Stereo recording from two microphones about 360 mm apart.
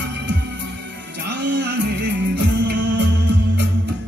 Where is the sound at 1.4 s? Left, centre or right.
Right.